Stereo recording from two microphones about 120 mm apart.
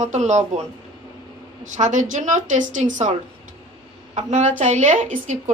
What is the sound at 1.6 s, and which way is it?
Speech, 90° right.